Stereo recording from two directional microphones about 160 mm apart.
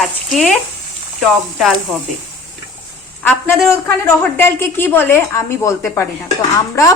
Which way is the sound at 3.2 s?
15° left (ahead or behind).